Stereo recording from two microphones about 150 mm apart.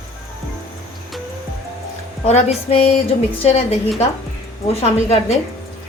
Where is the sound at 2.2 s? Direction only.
45° left (ahead or behind).